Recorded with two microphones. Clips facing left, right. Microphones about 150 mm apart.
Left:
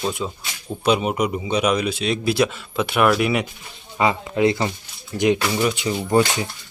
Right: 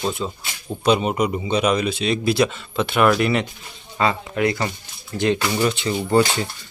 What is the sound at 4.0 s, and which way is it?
Speech, 15° left (ahead or behind).